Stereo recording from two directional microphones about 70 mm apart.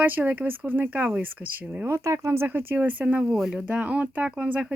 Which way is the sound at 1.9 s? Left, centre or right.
Right.